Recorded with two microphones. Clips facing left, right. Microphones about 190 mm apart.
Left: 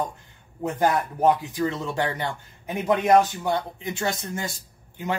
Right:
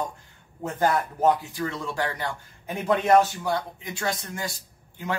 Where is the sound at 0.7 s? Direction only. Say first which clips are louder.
Left 1 dB; 15° left (ahead or behind).